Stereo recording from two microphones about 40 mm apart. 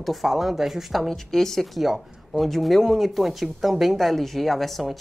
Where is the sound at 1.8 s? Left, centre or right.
Centre.